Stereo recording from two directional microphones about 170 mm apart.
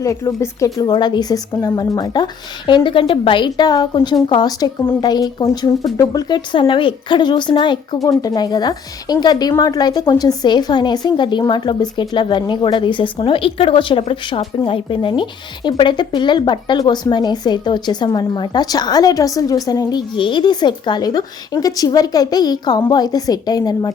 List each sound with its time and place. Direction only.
0.0 s a woman's voice: 20° left (ahead or behind)